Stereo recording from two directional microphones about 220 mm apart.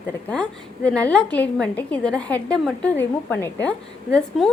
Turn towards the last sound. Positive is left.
turn(degrees=5)  # may be behind; listen again after turning